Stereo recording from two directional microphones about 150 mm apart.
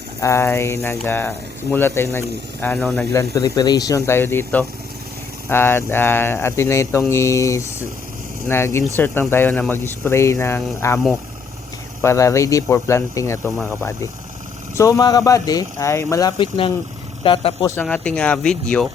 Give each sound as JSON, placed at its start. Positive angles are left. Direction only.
{"t": 0.2, "sound": "speech", "side_deg": 20}
{"t": 3.1, "sound": "speech", "side_deg": 20}
{"t": 12.0, "sound": "speech", "side_deg": 20}
{"t": 14.8, "sound": "speech", "side_deg": 20}
{"t": 16.4, "sound": "speech", "side_deg": 35}
{"t": 17.8, "sound": "speech", "side_deg": 5}